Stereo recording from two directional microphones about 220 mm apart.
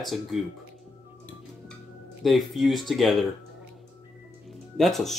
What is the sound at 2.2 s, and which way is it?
Speech, centre (ahead or behind).